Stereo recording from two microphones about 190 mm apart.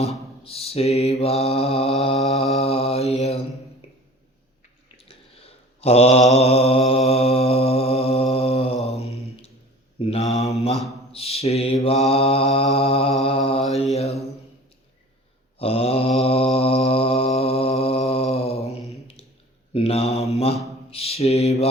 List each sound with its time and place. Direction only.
0.4 s mantra: 30° left (ahead or behind)
3.8 s a sound: 30° left (ahead or behind)
5.3 s mantra: 30° left (ahead or behind)
10.0 s mantra: 30° left (ahead or behind)
15.5 s mantra: 30° left (ahead or behind)